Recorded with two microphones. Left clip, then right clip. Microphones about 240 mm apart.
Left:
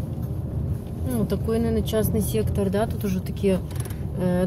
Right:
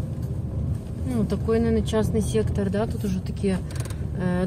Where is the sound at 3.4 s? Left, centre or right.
Centre.